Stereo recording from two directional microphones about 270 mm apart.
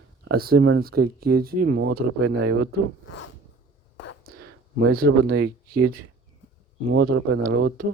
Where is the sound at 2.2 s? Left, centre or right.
Right.